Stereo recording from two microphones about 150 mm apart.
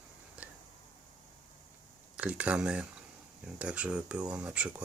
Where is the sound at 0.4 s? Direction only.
10° right (ahead or behind).